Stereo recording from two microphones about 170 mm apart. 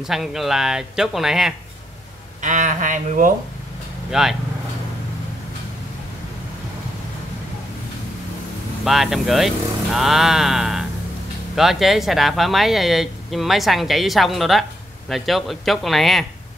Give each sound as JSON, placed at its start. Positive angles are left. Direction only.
{"t": 0.0, "sound": "speech", "side_deg": 0}
{"t": 2.4, "sound": "speech", "side_deg": -45}
{"t": 4.1, "sound": "speech", "side_deg": 0}
{"t": 8.8, "sound": "speech", "side_deg": 0}
{"t": 9.9, "sound": "music", "side_deg": 0}
{"t": 11.5, "sound": "speech", "side_deg": 0}